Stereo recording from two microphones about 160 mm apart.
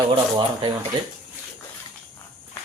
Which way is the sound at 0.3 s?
30° right (ahead or behind).